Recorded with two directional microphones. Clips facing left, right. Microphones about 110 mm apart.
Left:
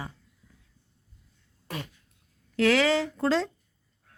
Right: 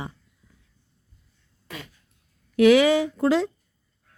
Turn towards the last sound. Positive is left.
turn(degrees=-10)  # may be behind; listen again after turning